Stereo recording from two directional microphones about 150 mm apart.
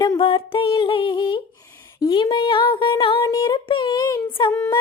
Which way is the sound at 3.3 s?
30° left (ahead or behind).